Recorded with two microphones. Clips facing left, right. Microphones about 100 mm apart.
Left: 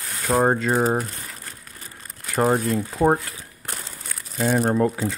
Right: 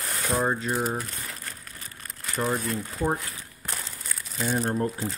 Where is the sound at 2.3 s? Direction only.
65° left (ahead or behind).